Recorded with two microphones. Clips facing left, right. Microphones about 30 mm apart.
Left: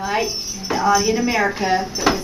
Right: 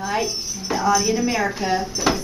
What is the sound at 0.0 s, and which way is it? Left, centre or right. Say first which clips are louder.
A woman's voice: left 2 dB; centre.